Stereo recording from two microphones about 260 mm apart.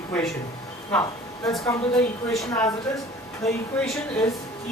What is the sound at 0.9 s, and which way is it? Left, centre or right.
A woman's voice, centre.